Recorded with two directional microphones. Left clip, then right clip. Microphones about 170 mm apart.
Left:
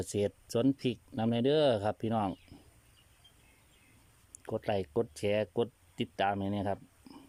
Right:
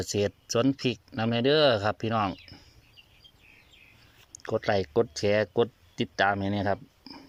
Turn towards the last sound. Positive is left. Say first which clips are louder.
# right 7 dB
turn(degrees=15)  # may be behind; listen again after turning